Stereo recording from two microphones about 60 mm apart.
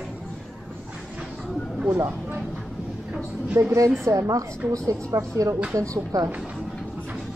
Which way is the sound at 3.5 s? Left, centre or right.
Right.